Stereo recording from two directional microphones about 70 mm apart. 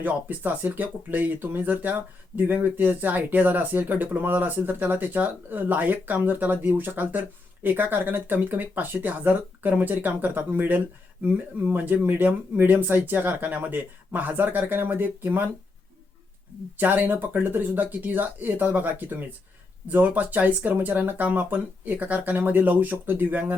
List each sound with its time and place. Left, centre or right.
0.0 s speech: right
16.7 s speech: right